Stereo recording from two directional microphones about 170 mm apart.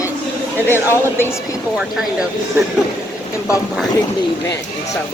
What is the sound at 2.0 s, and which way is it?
Speech, 5° right (ahead or behind).